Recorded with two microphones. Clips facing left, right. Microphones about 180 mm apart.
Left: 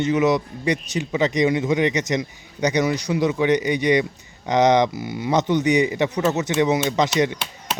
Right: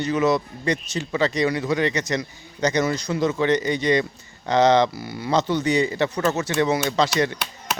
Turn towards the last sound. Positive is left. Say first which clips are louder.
# even
turn(degrees=20)  # may be behind; listen again after turning